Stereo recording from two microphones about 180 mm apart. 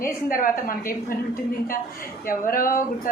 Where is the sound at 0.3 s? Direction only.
50° left (ahead or behind).